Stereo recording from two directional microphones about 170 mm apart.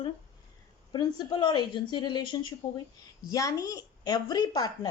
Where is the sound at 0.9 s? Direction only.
25° left (ahead or behind).